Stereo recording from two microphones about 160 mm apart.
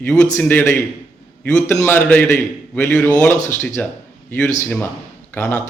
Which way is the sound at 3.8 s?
10° left (ahead or behind).